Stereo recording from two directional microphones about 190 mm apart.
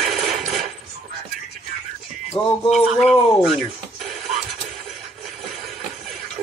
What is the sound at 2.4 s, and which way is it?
Music, 30° left (ahead or behind).